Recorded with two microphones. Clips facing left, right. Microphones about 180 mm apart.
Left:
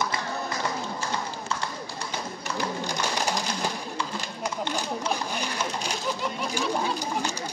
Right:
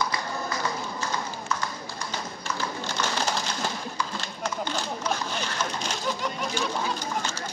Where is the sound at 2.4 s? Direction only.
15° left (ahead or behind).